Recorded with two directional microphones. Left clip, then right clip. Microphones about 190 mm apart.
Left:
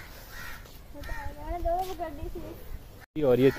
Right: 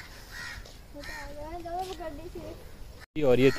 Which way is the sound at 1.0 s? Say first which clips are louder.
Even; 45° left (ahead or behind).